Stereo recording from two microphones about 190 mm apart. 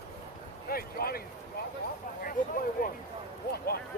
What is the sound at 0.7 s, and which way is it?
Speech, 50° left (ahead or behind).